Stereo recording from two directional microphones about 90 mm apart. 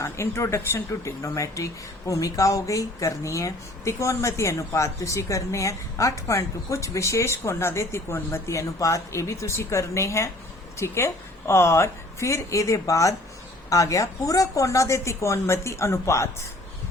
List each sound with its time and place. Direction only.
0.0 s speech: 30° left (ahead or behind)